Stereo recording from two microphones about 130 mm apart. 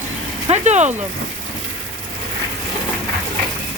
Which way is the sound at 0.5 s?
60° right (ahead or behind).